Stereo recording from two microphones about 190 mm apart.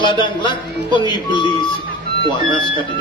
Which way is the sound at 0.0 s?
25° left (ahead or behind).